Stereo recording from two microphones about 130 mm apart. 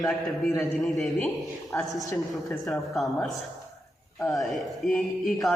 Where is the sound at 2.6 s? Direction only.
Centre (ahead or behind).